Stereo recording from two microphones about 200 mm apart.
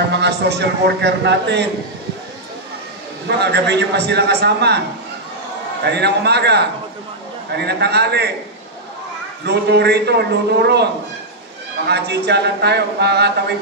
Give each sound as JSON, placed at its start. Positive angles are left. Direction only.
{"t": 0.1, "sound": "a man's voice", "side_deg": -55}
{"t": 3.3, "sound": "a man's voice", "side_deg": -60}
{"t": 5.9, "sound": "a man's voice", "side_deg": -55}
{"t": 9.4, "sound": "a man's voice", "side_deg": -55}
{"t": 11.9, "sound": "a man's voice", "side_deg": -55}